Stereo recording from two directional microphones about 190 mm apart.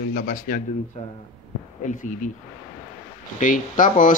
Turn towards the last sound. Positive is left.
turn(degrees=45)  # may be behind; listen again after turning